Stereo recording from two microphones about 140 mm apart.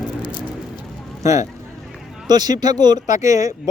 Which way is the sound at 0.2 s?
35° left (ahead or behind).